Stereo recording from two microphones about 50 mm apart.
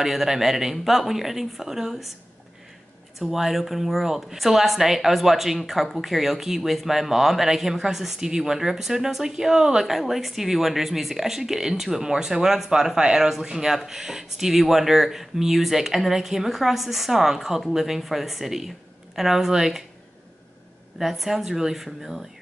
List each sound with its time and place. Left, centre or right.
0.0 s speech: centre
3.2 s speech: centre
21.0 s speech: centre